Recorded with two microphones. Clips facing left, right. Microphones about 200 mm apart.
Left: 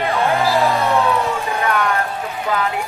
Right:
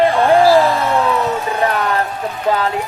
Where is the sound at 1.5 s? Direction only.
30° right (ahead or behind).